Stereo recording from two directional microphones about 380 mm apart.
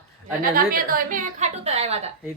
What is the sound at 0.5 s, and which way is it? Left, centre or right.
A woman's voice, right.